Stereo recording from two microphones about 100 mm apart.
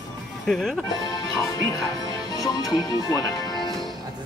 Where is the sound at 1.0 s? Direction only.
45° left (ahead or behind).